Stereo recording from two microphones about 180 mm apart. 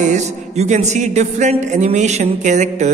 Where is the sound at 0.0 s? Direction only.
40° right (ahead or behind).